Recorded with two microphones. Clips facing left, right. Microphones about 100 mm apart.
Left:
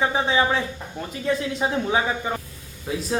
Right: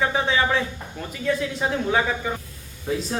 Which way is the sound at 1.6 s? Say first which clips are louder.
Even; 15° left (ahead or behind).